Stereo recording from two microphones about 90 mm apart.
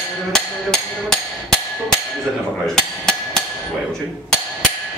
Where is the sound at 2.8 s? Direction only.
5° left (ahead or behind).